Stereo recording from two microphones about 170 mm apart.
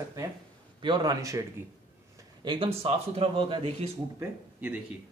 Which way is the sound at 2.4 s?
25° right (ahead or behind).